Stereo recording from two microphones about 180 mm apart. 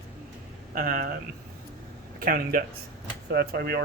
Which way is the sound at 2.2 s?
55° right (ahead or behind).